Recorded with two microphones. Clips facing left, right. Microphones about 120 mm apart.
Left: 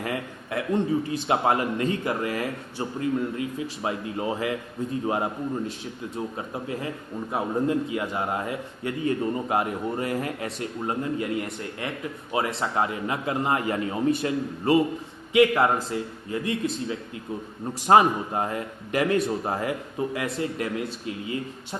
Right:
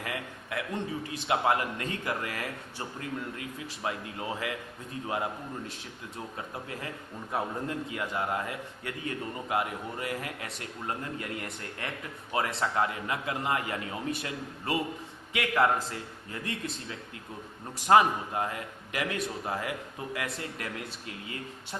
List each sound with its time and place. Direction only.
0.0 s a man's voice: 35° left (ahead or behind); by 16.6 s 15° left (ahead or behind)
17.8 s a man's voice: 30° left (ahead or behind)